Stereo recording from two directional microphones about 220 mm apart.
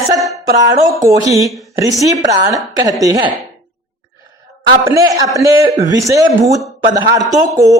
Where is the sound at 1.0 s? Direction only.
15° right (ahead or behind).